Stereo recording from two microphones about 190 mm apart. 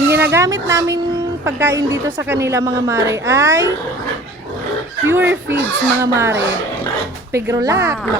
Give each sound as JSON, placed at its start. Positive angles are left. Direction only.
{"t": 0.1, "sound": "a woman's voice", "side_deg": -15}
{"t": 5.0, "sound": "a woman's voice", "side_deg": -10}